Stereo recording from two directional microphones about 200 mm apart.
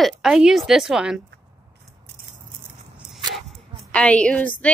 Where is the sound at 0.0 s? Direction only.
Centre (ahead or behind).